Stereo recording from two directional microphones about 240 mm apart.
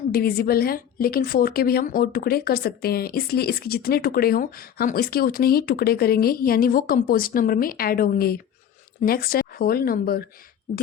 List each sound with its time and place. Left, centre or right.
0.1 s a woman's voice: left